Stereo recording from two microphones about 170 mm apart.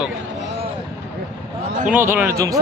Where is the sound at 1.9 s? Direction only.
10° right (ahead or behind).